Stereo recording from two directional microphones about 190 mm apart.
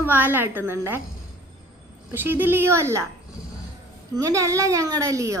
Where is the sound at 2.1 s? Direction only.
10° right (ahead or behind).